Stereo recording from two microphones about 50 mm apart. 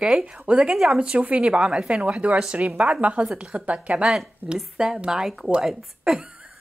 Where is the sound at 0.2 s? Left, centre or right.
Right.